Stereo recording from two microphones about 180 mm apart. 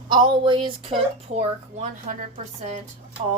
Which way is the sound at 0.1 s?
25° right (ahead or behind).